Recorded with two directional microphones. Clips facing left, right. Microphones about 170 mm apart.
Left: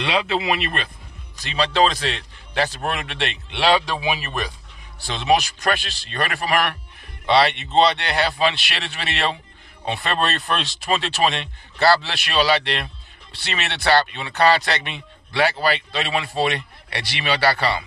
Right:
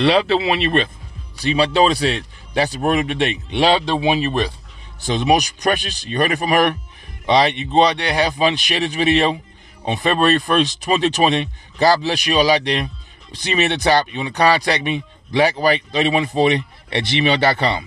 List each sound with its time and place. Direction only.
0.0 s speech: 35° right (ahead or behind)
1.4 s speech: 15° right (ahead or behind)
5.0 s speech: 15° right (ahead or behind)